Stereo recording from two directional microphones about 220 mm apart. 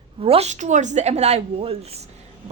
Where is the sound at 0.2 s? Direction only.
25° right (ahead or behind).